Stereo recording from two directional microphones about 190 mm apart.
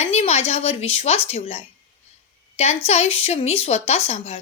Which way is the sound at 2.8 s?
35° left (ahead or behind).